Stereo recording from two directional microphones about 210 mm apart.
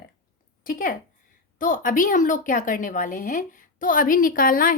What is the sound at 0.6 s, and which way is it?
A woman's voice, 40° left (ahead or behind).